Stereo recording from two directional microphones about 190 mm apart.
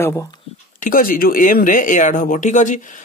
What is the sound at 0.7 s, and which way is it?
Speech, 45° left (ahead or behind).